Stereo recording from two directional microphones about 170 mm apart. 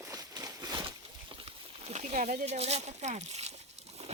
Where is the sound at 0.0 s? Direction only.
20° right (ahead or behind).